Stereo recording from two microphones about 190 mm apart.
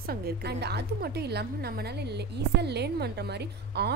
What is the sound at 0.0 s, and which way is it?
A woman's voice, 55° right (ahead or behind).